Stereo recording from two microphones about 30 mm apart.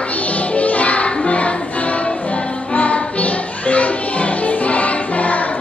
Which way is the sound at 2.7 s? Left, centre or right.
Left.